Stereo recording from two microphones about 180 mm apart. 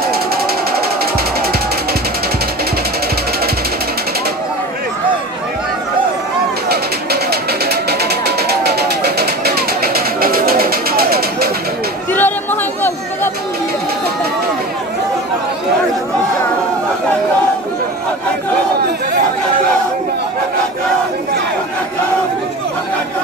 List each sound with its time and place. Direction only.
6.7 s a sound: 60° right (ahead or behind)
8.0 s vehicle: 60° right (ahead or behind)
12.1 s chatter: 10° left (ahead or behind)